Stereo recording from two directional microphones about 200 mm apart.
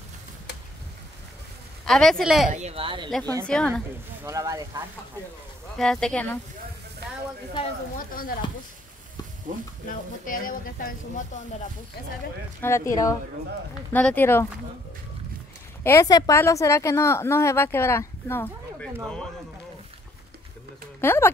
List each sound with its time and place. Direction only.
1.9 s speech: centre (ahead or behind)
2.5 s speech: 30° right (ahead or behind)
3.1 s speech: 5° left (ahead or behind)
4.2 s speech: 15° right (ahead or behind)
5.8 s speech: 5° left (ahead or behind)
7.0 s a sound: 55° right (ahead or behind)
9.8 s speech: 45° left (ahead or behind)
12.6 s a woman's voice: 15° left (ahead or behind)
15.8 s a woman's voice: 15° left (ahead or behind)
21.0 s speech: 10° left (ahead or behind)